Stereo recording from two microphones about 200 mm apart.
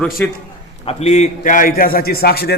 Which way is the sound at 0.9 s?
30° left (ahead or behind).